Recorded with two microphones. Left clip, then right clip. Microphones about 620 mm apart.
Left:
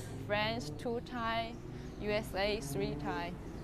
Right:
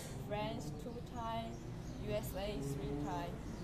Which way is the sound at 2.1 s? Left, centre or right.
Left.